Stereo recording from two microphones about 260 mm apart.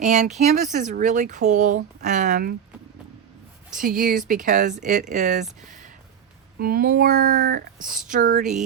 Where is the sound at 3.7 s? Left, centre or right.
Right.